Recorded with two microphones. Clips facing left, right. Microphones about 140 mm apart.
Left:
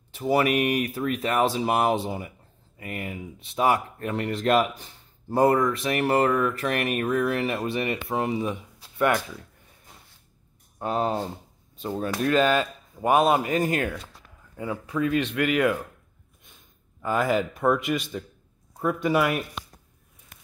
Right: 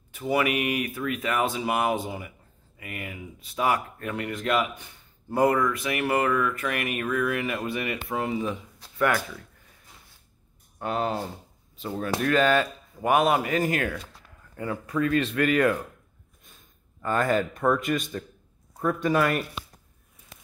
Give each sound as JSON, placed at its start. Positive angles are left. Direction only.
{"t": 0.1, "sound": "speech", "side_deg": 30}
{"t": 10.8, "sound": "speech", "side_deg": 30}
{"t": 14.6, "sound": "speech", "side_deg": 5}
{"t": 17.0, "sound": "speech", "side_deg": 10}